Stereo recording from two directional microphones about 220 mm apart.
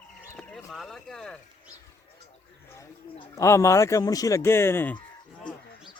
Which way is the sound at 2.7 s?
15° left (ahead or behind).